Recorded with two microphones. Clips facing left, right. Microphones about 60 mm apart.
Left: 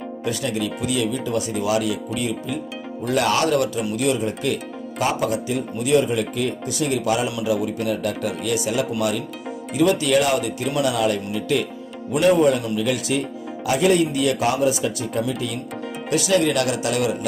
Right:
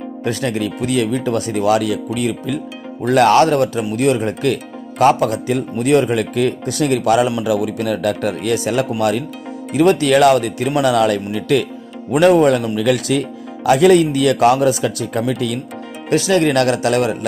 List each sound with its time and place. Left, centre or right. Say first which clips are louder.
0.2 s speech: right 5 dB; right
3.1 s speech: right 8 dB; right
7.4 s speech: right 4 dB; right
8.3 s speech: right 5 dB; right
12.1 s speech: right 5 dB; right
12.7 s speech: right 6 dB; right
16.1 s speech: right 5 dB; right